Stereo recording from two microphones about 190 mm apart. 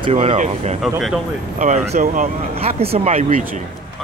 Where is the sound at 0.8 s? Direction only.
Centre (ahead or behind).